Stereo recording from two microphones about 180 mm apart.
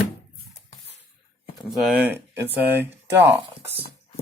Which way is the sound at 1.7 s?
Centre (ahead or behind).